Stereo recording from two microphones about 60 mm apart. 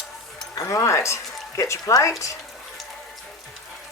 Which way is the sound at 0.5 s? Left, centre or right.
Left.